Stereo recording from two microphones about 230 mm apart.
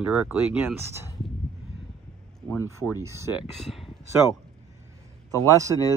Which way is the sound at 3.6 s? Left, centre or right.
Centre.